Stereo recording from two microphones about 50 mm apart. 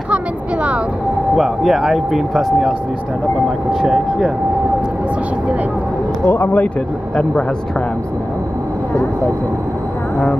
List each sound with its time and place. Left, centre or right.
0.1 s a sound: right
1.3 s speech: centre
6.2 s speech: left